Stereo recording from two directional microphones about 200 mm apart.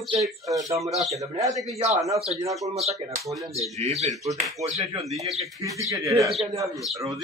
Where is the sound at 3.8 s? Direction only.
35° right (ahead or behind).